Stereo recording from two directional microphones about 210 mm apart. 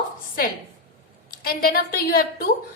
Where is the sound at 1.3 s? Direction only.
45° left (ahead or behind).